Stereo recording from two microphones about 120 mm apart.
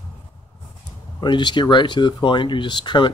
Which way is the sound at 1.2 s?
40° left (ahead or behind).